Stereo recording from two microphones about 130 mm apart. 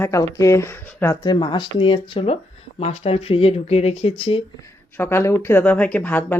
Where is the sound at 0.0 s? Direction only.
25° left (ahead or behind).